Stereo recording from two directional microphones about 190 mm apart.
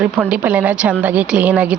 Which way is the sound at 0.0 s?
5° right (ahead or behind).